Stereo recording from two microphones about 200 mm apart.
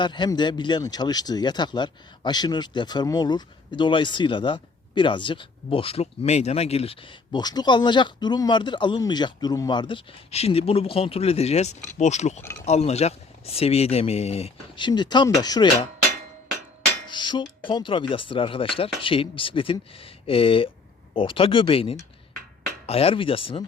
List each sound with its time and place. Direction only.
0.0 s speech: 20° left (ahead or behind)
17.1 s speech: 25° left (ahead or behind)